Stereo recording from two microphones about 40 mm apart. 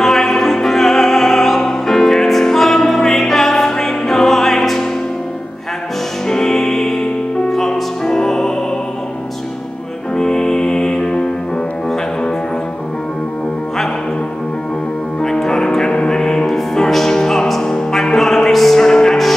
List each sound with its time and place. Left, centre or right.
0.0 s music: centre
6.2 s music: centre
10.1 s music: centre
15.2 s music: centre